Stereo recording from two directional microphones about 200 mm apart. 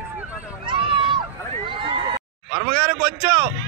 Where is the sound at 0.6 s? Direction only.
25° right (ahead or behind).